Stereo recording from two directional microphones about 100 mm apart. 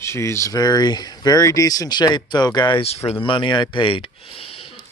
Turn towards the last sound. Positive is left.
turn(degrees=70)  # may be behind; listen again after turning